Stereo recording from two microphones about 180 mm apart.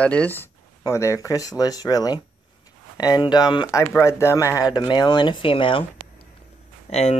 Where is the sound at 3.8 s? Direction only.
10° left (ahead or behind).